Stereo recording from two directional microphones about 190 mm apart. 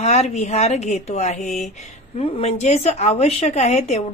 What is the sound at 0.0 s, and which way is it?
Speech, 35° left (ahead or behind).